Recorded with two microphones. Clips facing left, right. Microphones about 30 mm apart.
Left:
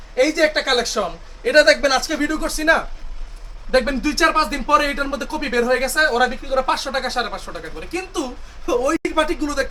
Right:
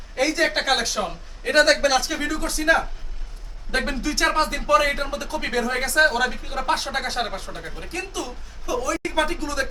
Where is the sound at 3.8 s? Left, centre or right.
Centre.